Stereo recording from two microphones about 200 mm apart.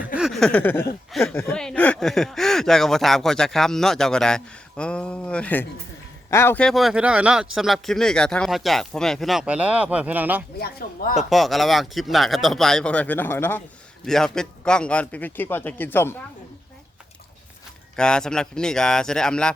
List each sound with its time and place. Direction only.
0.0 s speech: centre (ahead or behind)
10.6 s speech: 50° left (ahead or behind)
11.1 s a man's voice: centre (ahead or behind)
17.9 s speech: 5° left (ahead or behind)